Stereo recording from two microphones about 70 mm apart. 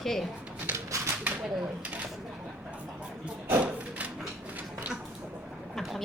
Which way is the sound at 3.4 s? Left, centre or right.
Right.